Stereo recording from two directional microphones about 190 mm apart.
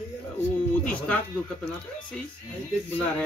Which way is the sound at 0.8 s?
5° left (ahead or behind).